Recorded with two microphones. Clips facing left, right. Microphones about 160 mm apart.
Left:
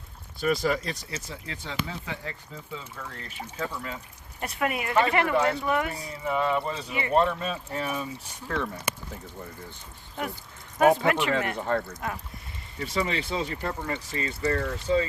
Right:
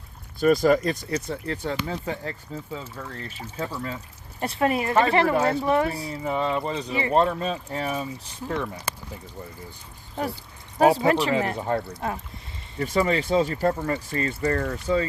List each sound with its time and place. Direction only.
0.3 s speech: 45° right (ahead or behind)
1.9 s speech: 40° right (ahead or behind)
10.8 s speech: 35° right (ahead or behind)
11.6 s speech: 15° right (ahead or behind)
12.8 s speech: 45° right (ahead or behind)